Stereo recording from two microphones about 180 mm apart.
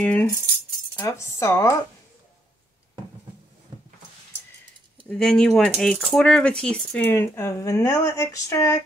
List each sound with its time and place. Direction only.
0.0 s music: 10° left (ahead or behind)
0.9 s speech: 15° left (ahead or behind)
5.0 s speech: 5° left (ahead or behind)